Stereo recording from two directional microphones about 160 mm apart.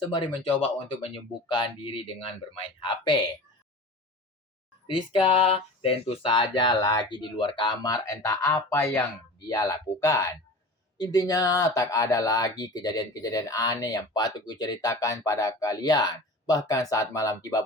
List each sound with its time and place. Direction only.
0.3 s speech: 35° left (ahead or behind)
4.9 s speech: 35° left (ahead or behind)